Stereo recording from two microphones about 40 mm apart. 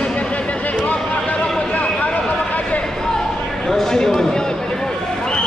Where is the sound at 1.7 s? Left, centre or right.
Left.